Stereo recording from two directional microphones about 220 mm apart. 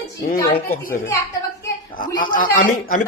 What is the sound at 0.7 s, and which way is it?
Speech, 40° left (ahead or behind).